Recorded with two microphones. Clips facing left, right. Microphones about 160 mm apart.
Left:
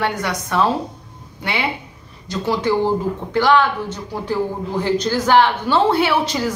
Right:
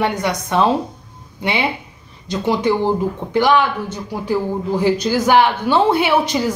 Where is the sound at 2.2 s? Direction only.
20° right (ahead or behind).